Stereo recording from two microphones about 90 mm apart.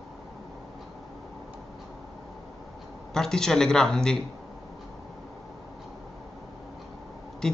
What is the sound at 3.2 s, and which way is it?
Speech, 5° left (ahead or behind).